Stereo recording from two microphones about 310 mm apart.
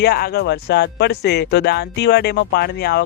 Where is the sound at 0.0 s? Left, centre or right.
Left.